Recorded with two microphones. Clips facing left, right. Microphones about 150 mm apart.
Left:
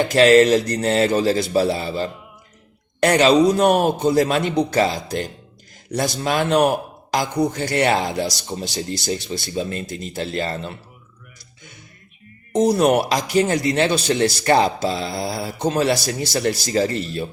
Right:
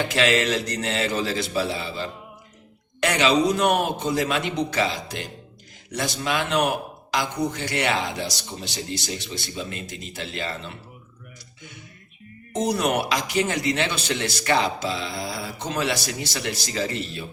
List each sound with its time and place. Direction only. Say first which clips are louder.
0.1 s a man's voice: left 13 dB; 40° left (ahead or behind)
12.5 s a man's voice: left 7 dB; 35° left (ahead or behind)